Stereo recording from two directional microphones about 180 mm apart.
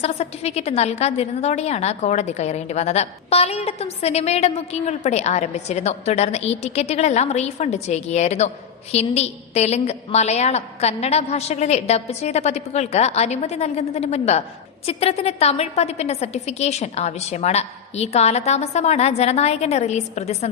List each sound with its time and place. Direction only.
0.0 s a woman's voice: 35° left (ahead or behind)